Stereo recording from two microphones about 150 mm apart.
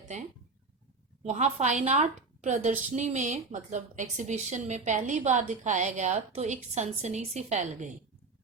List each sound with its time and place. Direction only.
1.2 s a woman's voice: 45° right (ahead or behind)